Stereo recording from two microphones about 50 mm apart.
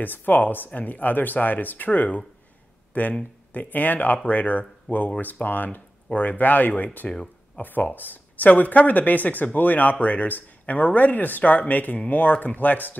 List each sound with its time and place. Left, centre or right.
0.0 s speech: left
7.1 s a sound: left
7.6 s speech: left